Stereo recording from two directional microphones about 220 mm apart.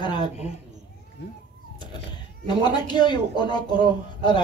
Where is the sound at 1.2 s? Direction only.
55° left (ahead or behind).